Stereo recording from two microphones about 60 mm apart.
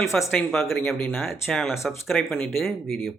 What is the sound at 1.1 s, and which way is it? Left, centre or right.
Speech, centre.